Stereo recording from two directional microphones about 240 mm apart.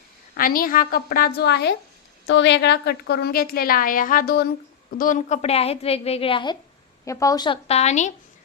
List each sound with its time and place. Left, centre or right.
0.3 s a woman's voice: left